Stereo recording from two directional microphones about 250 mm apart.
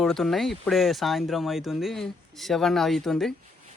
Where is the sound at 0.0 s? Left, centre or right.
Centre.